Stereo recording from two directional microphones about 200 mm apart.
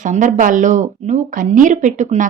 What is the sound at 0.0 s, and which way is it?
Speech, 40° right (ahead or behind).